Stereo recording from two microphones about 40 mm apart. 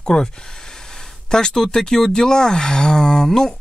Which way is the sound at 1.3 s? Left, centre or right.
Centre.